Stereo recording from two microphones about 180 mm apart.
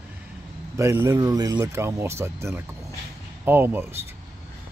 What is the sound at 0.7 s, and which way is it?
Speech, 15° right (ahead or behind).